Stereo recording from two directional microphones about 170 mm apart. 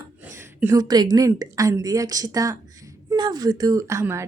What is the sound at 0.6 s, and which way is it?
A woman's voice, 20° right (ahead or behind).